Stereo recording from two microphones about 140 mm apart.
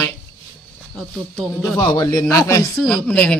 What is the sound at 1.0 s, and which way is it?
Speech, 5° left (ahead or behind).